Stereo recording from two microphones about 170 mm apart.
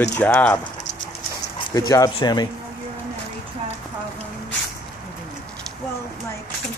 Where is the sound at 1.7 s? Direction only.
20° left (ahead or behind).